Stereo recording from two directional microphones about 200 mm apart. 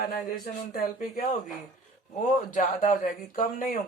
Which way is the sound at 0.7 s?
45° left (ahead or behind).